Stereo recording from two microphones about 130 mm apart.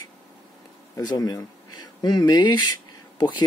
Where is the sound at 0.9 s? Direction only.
30° left (ahead or behind).